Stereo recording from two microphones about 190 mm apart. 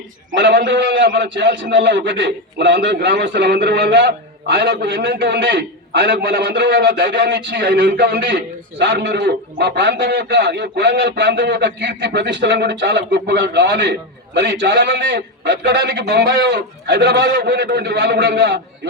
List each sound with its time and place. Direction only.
0.3 s a man's voice: 70° right (ahead or behind)